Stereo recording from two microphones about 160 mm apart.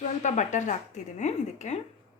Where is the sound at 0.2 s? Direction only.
50° left (ahead or behind).